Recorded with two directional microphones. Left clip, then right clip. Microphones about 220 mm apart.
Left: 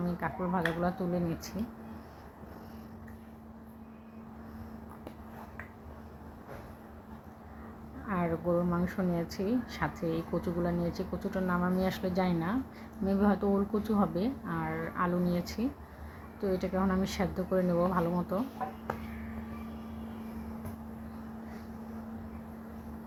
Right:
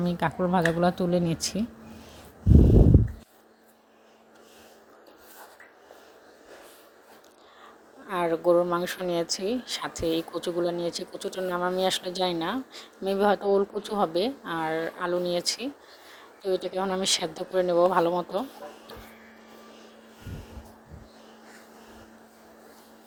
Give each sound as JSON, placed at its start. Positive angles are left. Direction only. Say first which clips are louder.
{"t": 0.0, "sound": "speech", "louder": "right 8 dB", "side_deg": -40}
{"t": 8.0, "sound": "speech", "louder": "right 9 dB", "side_deg": -45}